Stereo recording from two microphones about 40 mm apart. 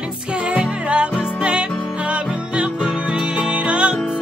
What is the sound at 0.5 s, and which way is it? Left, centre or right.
Music, right.